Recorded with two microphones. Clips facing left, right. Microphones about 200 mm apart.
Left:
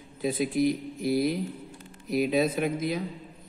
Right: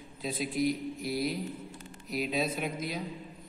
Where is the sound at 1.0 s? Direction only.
50° left (ahead or behind).